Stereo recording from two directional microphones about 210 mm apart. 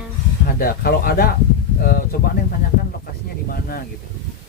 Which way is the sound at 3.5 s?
45° left (ahead or behind).